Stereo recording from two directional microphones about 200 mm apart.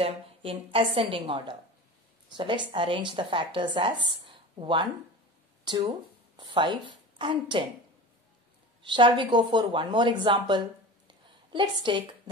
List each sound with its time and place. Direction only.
0.0 s a woman's voice: 25° right (ahead or behind)
8.8 s speech: 25° right (ahead or behind)
11.1 s a sound: 25° right (ahead or behind)